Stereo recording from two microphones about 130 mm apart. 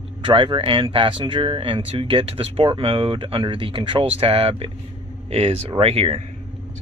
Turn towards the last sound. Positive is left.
turn(degrees=-50)  # may be behind; listen again after turning